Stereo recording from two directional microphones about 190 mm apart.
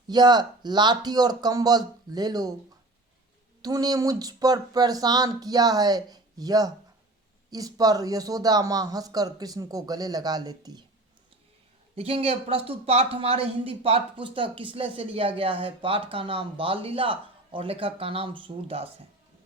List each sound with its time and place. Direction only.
0.1 s speech: 20° right (ahead or behind)
3.6 s speech: 20° right (ahead or behind)
11.9 s speech: 30° right (ahead or behind)